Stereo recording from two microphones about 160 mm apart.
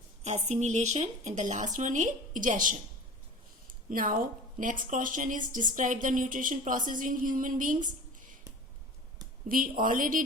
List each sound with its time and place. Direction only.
0.3 s a woman's voice: 45° right (ahead or behind)
9.5 s a woman's voice: 60° right (ahead or behind)